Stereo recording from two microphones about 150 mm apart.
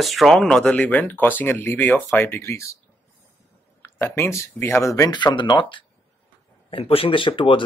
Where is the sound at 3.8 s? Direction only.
15° left (ahead or behind).